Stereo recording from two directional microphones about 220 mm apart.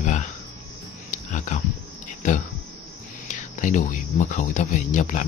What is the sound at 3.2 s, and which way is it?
Speech, 35° left (ahead or behind).